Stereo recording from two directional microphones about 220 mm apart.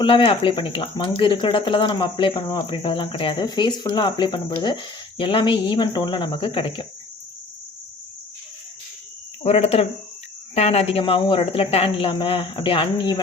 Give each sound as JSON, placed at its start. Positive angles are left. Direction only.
{"t": 0.0, "sound": "speech", "side_deg": 25}
{"t": 9.4, "sound": "speech", "side_deg": 25}